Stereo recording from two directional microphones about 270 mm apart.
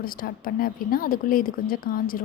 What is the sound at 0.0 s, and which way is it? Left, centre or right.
A woman's voice, left.